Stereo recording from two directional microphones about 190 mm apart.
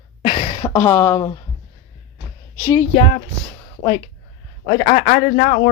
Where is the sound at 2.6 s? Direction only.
15° left (ahead or behind).